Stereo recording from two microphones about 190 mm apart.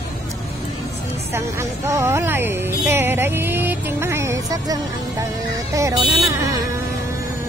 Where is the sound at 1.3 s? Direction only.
15° right (ahead or behind).